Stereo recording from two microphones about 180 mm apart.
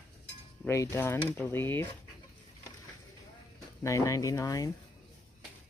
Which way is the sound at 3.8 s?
15° left (ahead or behind).